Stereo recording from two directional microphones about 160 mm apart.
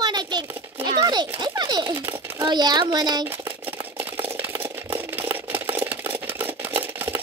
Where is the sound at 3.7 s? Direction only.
15° right (ahead or behind).